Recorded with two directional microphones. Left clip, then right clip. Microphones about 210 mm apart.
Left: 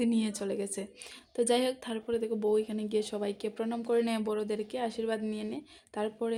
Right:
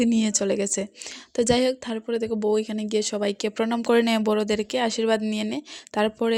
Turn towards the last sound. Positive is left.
turn(degrees=-35)  # may be behind; listen again after turning